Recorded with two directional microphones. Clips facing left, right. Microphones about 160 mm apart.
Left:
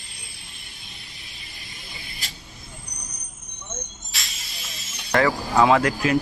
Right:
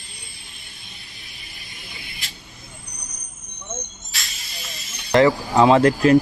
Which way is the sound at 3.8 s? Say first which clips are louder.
Right 1 dB; centre (ahead or behind).